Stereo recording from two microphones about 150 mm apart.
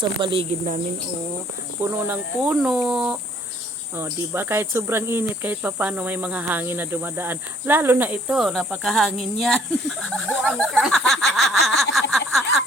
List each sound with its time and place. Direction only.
0.0 s speech: 35° right (ahead or behind)
1.8 s speech: 10° right (ahead or behind)
3.9 s speech: 15° right (ahead or behind); by 10.3 s 5° left (ahead or behind)
10.4 s speech: 5° right (ahead or behind)